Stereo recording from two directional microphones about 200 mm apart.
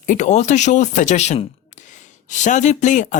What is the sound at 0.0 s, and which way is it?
Speech, 40° left (ahead or behind).